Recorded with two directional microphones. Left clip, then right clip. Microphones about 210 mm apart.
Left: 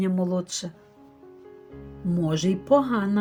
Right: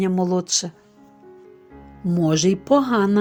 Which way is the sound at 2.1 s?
45° right (ahead or behind).